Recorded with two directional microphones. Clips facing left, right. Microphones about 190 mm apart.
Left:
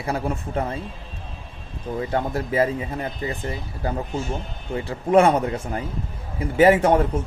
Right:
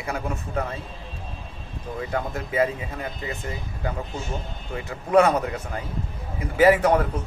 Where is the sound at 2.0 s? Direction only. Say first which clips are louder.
Left 4 dB; 30° left (ahead or behind).